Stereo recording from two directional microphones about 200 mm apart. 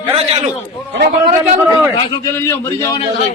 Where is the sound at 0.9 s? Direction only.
50° right (ahead or behind).